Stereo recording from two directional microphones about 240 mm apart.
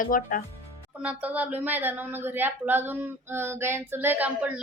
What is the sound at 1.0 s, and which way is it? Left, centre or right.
A woman's voice, centre.